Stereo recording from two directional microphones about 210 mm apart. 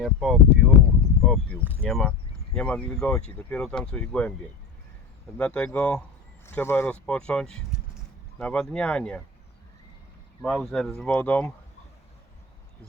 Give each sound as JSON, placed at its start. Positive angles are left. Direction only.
{"t": 0.0, "sound": "speech", "side_deg": 0}
{"t": 1.2, "sound": "a sound", "side_deg": 0}
{"t": 1.8, "sound": "speech", "side_deg": 5}
{"t": 5.4, "sound": "speech", "side_deg": 5}
{"t": 10.4, "sound": "speech", "side_deg": 0}